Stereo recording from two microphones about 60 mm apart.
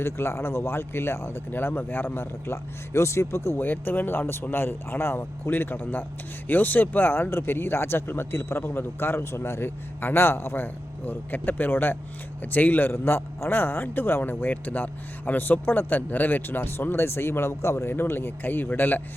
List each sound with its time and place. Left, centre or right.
0.0 s a man's voice: left
3.6 s a man's voice: left